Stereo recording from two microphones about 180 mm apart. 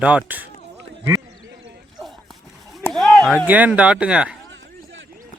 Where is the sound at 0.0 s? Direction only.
5° right (ahead or behind).